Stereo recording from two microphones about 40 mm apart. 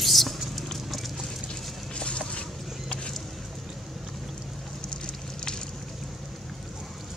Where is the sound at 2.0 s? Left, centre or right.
Left.